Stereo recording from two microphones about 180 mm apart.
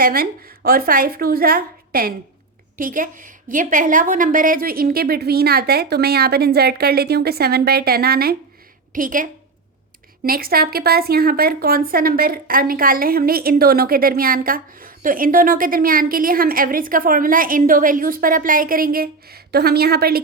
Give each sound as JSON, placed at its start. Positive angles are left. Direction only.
{"t": 0.0, "sound": "a woman's voice", "side_deg": -55}
{"t": 8.9, "sound": "a woman's voice", "side_deg": -50}